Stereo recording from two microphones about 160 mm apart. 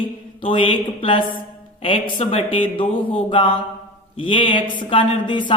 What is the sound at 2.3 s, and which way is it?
Speech, 35° left (ahead or behind).